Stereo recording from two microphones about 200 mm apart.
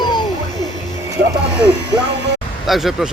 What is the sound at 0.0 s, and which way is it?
Music, 20° left (ahead or behind).